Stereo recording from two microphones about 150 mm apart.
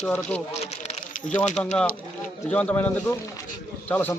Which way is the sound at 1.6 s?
10° left (ahead or behind).